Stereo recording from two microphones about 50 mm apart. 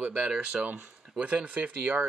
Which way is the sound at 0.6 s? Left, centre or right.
Right.